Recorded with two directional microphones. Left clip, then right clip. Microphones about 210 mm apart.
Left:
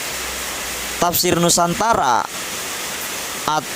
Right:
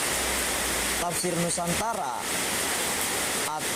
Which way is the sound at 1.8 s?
50° left (ahead or behind).